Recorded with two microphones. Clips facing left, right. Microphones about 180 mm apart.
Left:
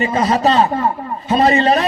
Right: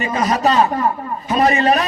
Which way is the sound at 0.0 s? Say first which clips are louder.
Left 2 dB; 35° left (ahead or behind).